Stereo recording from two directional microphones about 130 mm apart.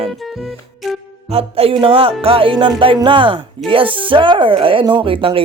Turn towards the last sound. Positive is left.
turn(degrees=-45)  # may be behind; listen again after turning